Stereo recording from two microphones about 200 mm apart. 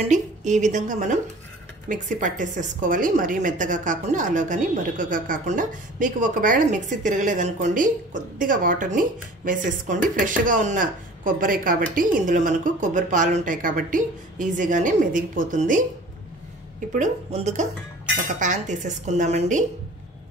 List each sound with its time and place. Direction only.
0.0 s a woman's voice: 35° right (ahead or behind)
16.9 s a woman's voice: 35° right (ahead or behind)